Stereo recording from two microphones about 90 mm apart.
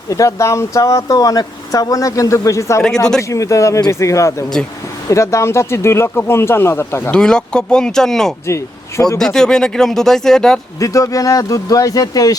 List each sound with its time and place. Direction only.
0.1 s speech: 35° left (ahead or behind)
7.1 s speech: 10° left (ahead or behind)
8.4 s speech: 35° left (ahead or behind)
9.1 s speech: 5° left (ahead or behind)
10.8 s speech: 40° left (ahead or behind)